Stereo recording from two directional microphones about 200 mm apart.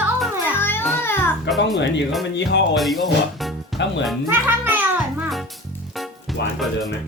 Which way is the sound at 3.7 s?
60° left (ahead or behind).